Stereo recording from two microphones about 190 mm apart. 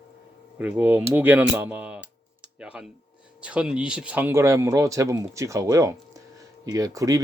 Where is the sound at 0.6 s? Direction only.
10° right (ahead or behind).